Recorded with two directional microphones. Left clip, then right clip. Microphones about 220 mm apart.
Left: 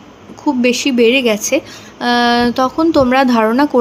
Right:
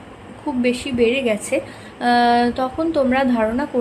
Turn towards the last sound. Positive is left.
turn(degrees=25)  # may be behind; listen again after turning